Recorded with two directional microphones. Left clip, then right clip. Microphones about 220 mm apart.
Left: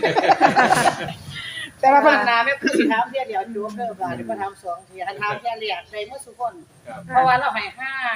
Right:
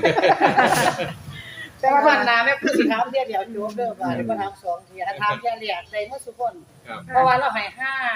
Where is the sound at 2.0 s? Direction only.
Centre (ahead or behind).